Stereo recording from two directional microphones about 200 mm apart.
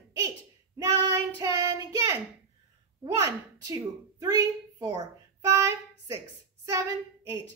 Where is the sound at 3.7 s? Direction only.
15° right (ahead or behind).